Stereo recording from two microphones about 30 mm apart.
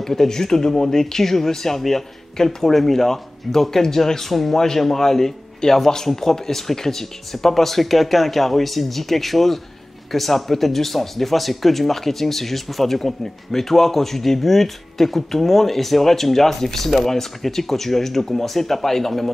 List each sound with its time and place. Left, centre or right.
0.0 s speech: centre
4.3 s speech: centre
4.6 s speech: centre